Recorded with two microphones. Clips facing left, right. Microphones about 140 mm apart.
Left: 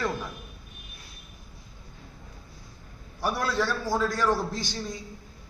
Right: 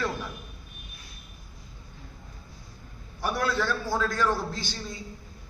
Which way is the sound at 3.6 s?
15° left (ahead or behind).